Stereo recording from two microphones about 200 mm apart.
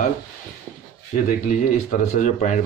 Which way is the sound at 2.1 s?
40° left (ahead or behind).